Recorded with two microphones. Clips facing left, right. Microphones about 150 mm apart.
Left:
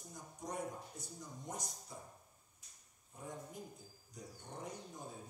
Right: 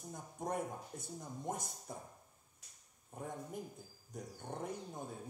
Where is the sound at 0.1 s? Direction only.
55° right (ahead or behind).